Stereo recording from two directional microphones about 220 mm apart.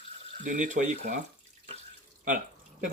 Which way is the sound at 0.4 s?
35° right (ahead or behind).